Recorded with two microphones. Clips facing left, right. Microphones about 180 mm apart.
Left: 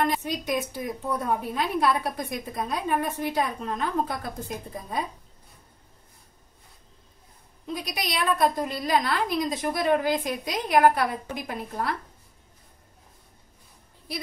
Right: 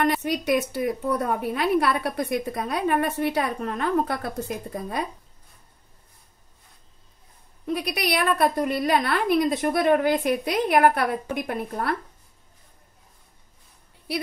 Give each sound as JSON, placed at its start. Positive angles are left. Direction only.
{"t": 0.0, "sound": "a woman's voice", "side_deg": -70}
{"t": 7.6, "sound": "a woman's voice", "side_deg": -65}